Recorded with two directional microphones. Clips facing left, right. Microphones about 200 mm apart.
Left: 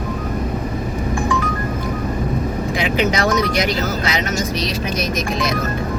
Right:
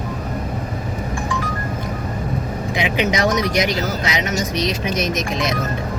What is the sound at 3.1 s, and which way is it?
Speech, 20° right (ahead or behind).